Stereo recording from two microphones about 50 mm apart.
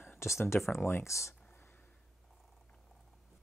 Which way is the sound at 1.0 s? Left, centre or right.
Left.